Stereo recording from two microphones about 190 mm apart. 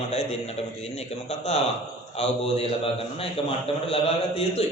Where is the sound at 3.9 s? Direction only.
30° left (ahead or behind).